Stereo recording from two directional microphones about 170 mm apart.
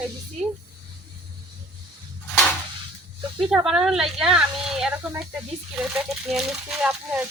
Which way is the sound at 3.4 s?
5° right (ahead or behind).